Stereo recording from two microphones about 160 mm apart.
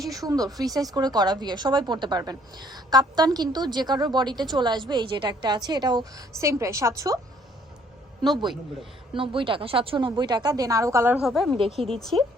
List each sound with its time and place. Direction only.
0.0 s a woman's voice: 20° right (ahead or behind)
8.2 s a woman's voice: 30° right (ahead or behind)
11.2 s a woman's voice: centre (ahead or behind)
11.5 s speech: 35° right (ahead or behind)
11.9 s a woman's voice: centre (ahead or behind)